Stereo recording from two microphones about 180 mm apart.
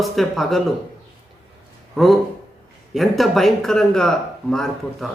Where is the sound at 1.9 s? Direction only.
Centre (ahead or behind).